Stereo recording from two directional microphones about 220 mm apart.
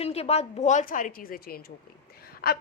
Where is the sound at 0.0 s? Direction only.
30° left (ahead or behind).